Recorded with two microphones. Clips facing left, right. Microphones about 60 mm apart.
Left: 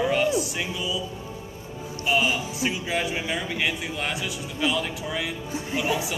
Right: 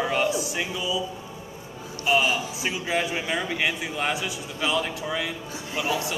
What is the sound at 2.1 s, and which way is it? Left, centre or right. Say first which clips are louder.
Speech: right 1 dB; centre.